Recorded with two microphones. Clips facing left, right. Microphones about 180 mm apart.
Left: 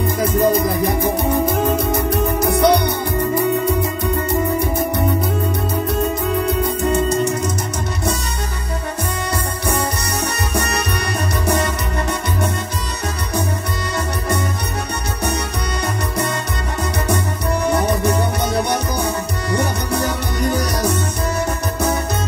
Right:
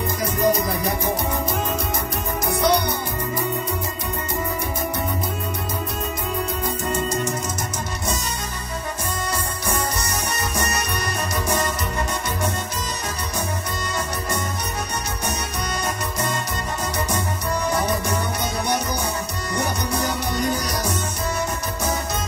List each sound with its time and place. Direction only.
0.2 s music: 55° left (ahead or behind)
11.4 s music: 65° left (ahead or behind)
17.6 s music: 60° left (ahead or behind)
19.5 s music: 60° left (ahead or behind)